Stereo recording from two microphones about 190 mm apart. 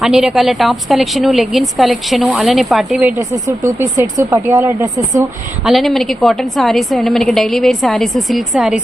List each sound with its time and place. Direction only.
0.0 s a woman's voice: 5° right (ahead or behind)
3.3 s speech: 15° right (ahead or behind)
5.6 s a woman's voice: centre (ahead or behind)